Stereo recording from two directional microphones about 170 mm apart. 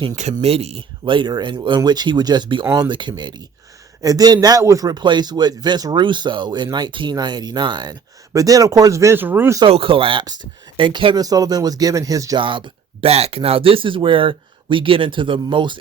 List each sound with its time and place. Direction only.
0.4 s a man's voice: 35° right (ahead or behind); by 9.6 s 10° right (ahead or behind)
9.6 s a man's voice: 35° right (ahead or behind)